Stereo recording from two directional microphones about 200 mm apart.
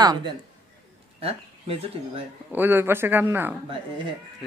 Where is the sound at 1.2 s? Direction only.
30° right (ahead or behind).